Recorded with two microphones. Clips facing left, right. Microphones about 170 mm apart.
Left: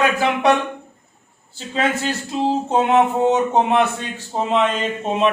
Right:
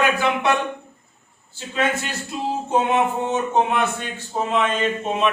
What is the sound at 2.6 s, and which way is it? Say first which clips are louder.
Speech: left 2 dB; 35° left (ahead or behind).